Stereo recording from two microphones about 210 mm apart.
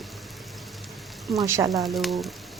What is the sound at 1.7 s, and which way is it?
Stir, centre (ahead or behind).